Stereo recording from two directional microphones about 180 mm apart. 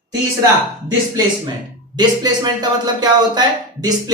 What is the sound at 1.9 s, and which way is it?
Speech, 25° right (ahead or behind).